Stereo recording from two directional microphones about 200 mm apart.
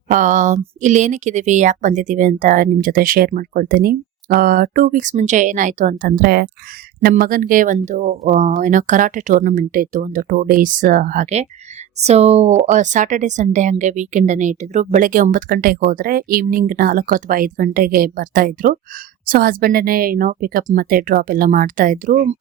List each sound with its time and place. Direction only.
0.1 s a woman's voice: 40° right (ahead or behind)